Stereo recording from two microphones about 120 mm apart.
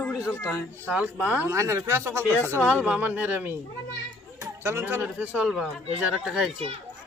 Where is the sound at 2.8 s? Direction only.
15° right (ahead or behind).